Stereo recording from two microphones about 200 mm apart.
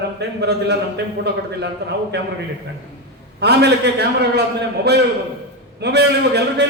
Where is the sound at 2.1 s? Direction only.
55° right (ahead or behind).